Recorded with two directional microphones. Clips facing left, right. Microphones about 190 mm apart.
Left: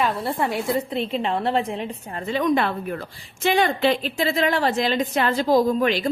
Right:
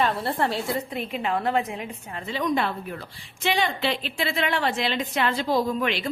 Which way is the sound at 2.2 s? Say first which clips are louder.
Left 4 dB; 55° left (ahead or behind).